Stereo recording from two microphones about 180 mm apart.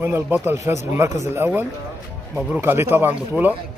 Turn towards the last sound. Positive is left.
turn(degrees=-10)  # may be behind; listen again after turning